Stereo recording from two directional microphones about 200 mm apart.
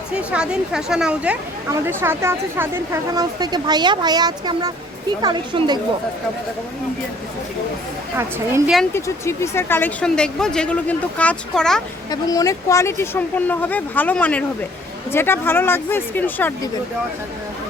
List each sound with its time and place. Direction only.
0.2 s speech: 5° right (ahead or behind); by 5.8 s 20° right (ahead or behind)
8.1 s a woman's voice: 10° right (ahead or behind)
8.9 s speech: 15° left (ahead or behind)
12.1 s speech: 15° left (ahead or behind)